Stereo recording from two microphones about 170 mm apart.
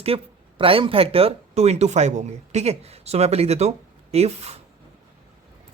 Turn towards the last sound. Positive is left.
turn(degrees=-40)  # may be behind; listen again after turning